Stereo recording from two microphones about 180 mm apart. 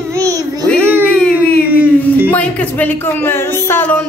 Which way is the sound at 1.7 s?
10° right (ahead or behind).